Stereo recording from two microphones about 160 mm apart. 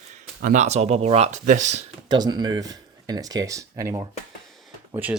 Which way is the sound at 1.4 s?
55° right (ahead or behind).